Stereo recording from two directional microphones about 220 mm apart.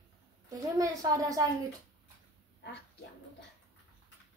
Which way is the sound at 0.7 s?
15° right (ahead or behind).